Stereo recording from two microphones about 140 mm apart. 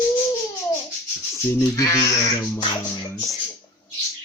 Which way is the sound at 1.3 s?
20° left (ahead or behind).